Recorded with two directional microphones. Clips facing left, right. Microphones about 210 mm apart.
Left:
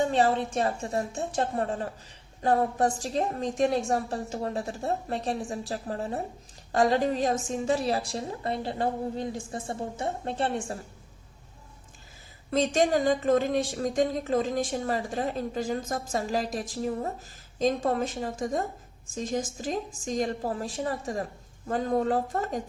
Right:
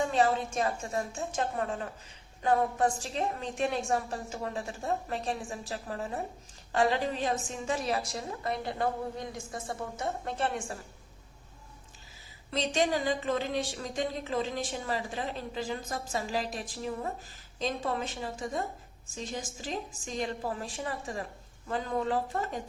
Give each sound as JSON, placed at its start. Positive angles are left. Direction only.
{"t": 0.0, "sound": "a woman's voice", "side_deg": 35}
{"t": 12.5, "sound": "a woman's voice", "side_deg": 50}